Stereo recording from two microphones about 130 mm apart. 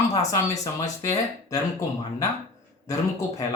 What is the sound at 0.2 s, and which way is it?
Speech, 25° left (ahead or behind).